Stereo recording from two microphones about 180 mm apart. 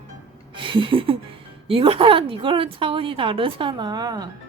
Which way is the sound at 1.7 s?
30° right (ahead or behind).